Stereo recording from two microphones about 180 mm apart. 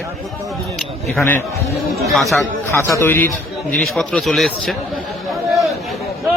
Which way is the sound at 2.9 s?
10° left (ahead or behind).